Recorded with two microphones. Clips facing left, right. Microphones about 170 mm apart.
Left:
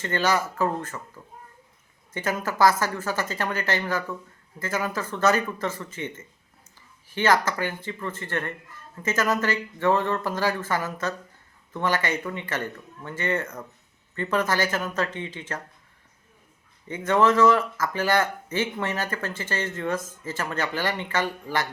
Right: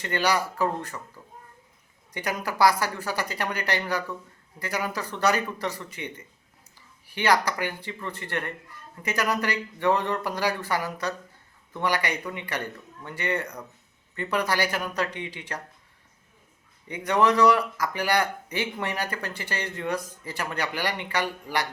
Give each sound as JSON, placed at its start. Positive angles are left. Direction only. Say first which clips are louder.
{"t": 0.0, "sound": "speech", "louder": "left 1 dB", "side_deg": -15}
{"t": 1.2, "sound": "a child's voice", "louder": "left 2 dB", "side_deg": 10}
{"t": 2.1, "sound": "speech", "louder": "left 2 dB", "side_deg": -15}
{"t": 16.9, "sound": "speech", "louder": "left 2 dB", "side_deg": -15}